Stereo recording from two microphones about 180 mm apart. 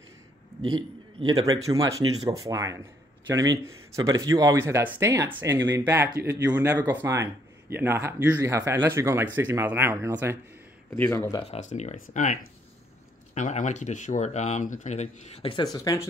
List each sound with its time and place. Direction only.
0.7 s speech: 25° right (ahead or behind)
10.9 s speech: 15° left (ahead or behind)
11.4 s speech: 35° left (ahead or behind); by 16.1 s 20° left (ahead or behind)